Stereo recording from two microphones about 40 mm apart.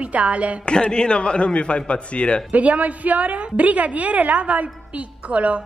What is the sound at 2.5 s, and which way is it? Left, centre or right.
A woman's voice, right.